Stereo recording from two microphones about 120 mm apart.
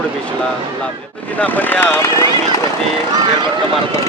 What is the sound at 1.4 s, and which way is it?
Speech, 15° left (ahead or behind).